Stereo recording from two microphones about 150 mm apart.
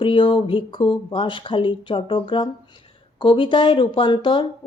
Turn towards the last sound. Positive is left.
turn(degrees=35)  # may be behind; listen again after turning